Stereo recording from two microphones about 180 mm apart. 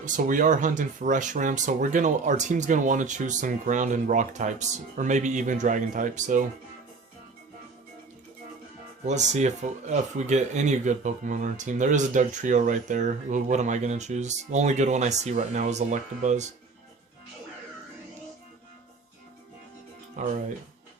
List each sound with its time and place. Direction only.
0.0 s speech: 50° right (ahead or behind)
9.0 s speech: 40° right (ahead or behind)
20.2 s speech: 40° right (ahead or behind)